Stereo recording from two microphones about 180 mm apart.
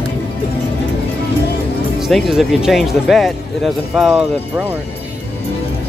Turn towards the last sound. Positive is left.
turn(degrees=-5)  # may be behind; listen again after turning